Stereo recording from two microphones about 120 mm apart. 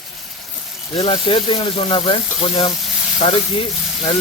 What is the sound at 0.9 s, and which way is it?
Stir, 50° left (ahead or behind).